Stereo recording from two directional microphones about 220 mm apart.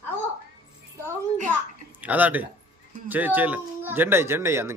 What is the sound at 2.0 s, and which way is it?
Speech, 5° right (ahead or behind).